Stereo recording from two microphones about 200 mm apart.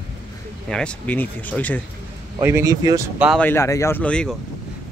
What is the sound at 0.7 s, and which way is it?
Speech, 5° left (ahead or behind).